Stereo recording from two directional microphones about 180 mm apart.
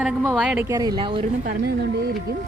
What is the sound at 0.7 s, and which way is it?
Speech, 20° right (ahead or behind).